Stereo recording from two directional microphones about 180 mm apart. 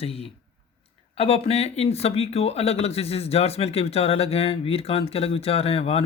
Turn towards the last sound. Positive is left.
turn(degrees=35)  # may be behind; listen again after turning